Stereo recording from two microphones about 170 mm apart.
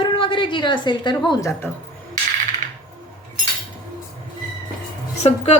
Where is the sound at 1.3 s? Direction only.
20° left (ahead or behind).